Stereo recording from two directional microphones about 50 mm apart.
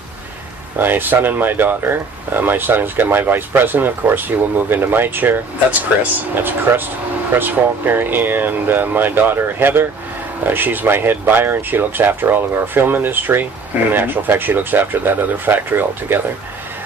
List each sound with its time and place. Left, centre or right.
0.8 s speech: right